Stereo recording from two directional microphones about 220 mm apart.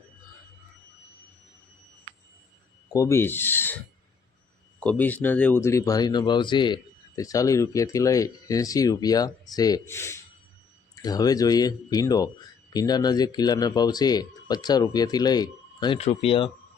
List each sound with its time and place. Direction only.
2.9 s speech: 15° left (ahead or behind)
4.8 s speech: 5° left (ahead or behind); by 16.5 s 25° left (ahead or behind)